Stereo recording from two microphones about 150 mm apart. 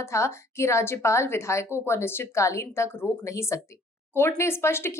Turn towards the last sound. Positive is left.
turn(degrees=15)  # may be behind; listen again after turning